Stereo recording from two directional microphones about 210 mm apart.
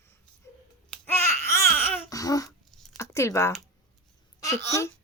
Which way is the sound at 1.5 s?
15° left (ahead or behind).